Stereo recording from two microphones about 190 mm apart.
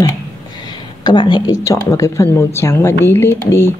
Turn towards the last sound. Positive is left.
turn(degrees=15)  # may be behind; listen again after turning